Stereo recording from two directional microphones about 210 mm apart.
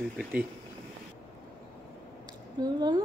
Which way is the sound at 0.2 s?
5° right (ahead or behind).